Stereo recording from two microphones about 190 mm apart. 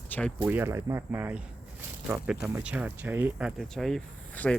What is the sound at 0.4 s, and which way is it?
Speech, 10° right (ahead or behind).